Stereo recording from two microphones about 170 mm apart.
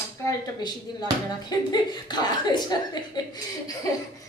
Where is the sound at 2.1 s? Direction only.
25° left (ahead or behind).